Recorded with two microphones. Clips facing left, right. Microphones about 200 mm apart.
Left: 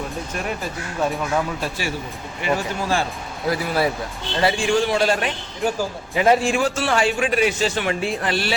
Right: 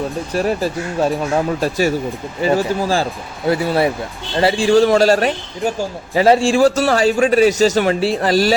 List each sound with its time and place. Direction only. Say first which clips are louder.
0.3 s a man's voice: right 11 dB; 35° right (ahead or behind)